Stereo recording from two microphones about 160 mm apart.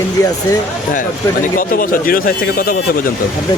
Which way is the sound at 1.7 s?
65° left (ahead or behind).